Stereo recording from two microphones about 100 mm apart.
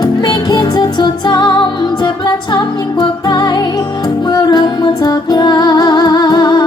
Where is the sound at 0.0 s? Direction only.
45° left (ahead or behind).